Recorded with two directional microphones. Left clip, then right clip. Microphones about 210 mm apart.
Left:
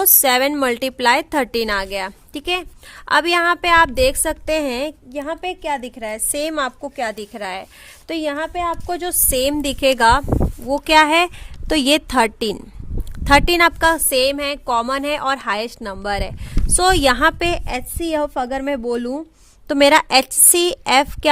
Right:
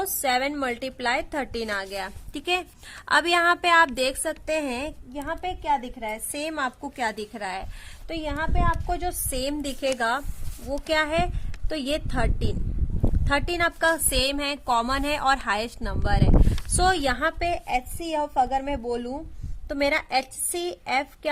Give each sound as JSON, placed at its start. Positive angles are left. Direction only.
{"t": 0.0, "sound": "a woman's voice", "side_deg": 45}
{"t": 8.0, "sound": "a woman's voice", "side_deg": 50}